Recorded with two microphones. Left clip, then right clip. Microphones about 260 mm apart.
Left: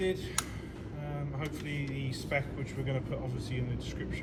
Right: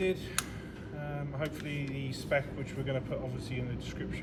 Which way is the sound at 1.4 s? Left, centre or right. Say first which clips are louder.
Right 2 dB; centre.